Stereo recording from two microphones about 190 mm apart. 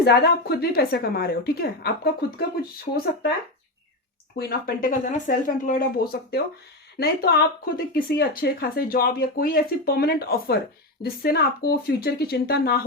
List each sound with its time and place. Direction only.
0.0 s a woman's voice: 60° left (ahead or behind)
4.4 s a woman's voice: 55° left (ahead or behind)